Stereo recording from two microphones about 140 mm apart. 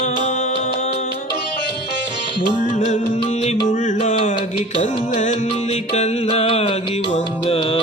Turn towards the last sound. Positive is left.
turn(degrees=40)  # may be behind; listen again after turning